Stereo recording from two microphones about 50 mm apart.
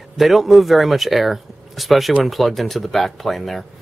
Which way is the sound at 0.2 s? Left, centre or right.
Centre.